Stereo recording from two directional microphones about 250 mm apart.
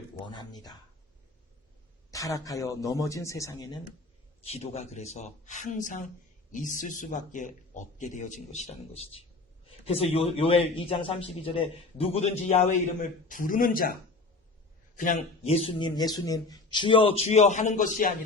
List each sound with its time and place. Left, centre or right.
0.3 s speech: centre
2.0 s speech: centre
4.4 s a man's voice: left
14.9 s a man's voice: left